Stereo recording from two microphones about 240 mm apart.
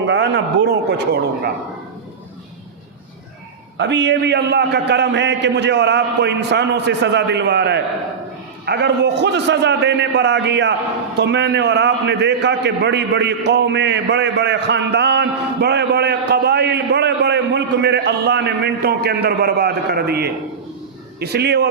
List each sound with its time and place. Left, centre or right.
0.0 s a man's voice: right
3.8 s a man's voice: right